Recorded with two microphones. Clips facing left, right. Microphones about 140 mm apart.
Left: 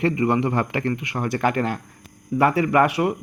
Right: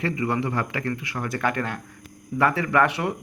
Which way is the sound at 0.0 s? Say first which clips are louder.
Left 5 dB; 25° left (ahead or behind).